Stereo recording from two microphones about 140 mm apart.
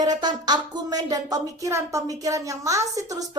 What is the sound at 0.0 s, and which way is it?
A woman's voice, 30° right (ahead or behind).